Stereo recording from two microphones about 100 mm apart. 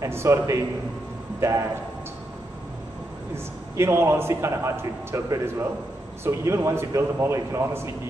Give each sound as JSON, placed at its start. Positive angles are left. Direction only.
{"t": 0.0, "sound": "a man's voice", "side_deg": -30}
{"t": 3.7, "sound": "a man's voice", "side_deg": -30}